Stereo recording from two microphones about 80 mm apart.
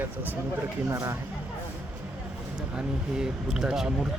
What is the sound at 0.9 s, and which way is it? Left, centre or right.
Speech, right.